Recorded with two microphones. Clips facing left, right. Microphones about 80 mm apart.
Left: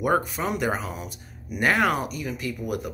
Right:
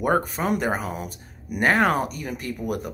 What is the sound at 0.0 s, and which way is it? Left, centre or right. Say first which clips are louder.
Speech: right 1 dB; right.